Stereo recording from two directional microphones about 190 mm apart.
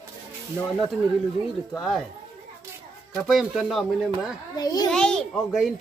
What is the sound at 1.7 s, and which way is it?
Speech, centre (ahead or behind).